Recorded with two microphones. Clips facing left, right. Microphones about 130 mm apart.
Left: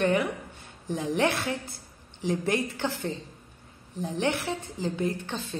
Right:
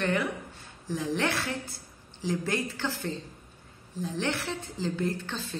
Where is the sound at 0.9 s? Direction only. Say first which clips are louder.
Left 3 dB; 20° left (ahead or behind).